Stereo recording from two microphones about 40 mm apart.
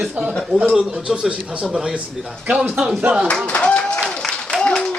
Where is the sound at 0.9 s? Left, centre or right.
Right.